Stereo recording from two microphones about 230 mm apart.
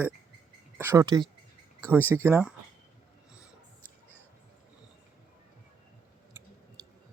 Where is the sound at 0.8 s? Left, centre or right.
Centre.